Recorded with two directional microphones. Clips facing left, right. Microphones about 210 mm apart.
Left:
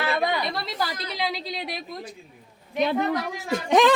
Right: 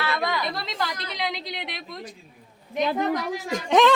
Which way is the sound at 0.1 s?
30° left (ahead or behind).